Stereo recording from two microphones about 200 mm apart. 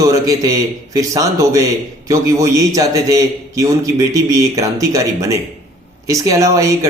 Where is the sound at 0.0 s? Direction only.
15° right (ahead or behind).